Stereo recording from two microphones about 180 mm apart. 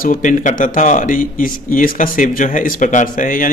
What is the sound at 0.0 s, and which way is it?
Speech, 45° left (ahead or behind).